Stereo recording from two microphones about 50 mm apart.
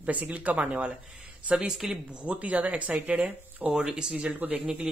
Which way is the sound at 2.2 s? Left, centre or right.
Right.